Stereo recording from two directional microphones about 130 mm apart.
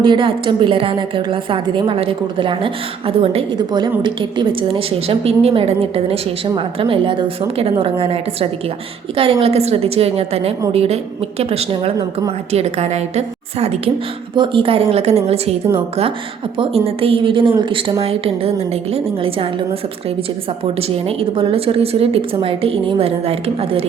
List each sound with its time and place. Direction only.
0.0 s a woman's voice: 40° right (ahead or behind)
14.3 s a woman's voice: 40° right (ahead or behind)
20.7 s a woman's voice: 50° right (ahead or behind)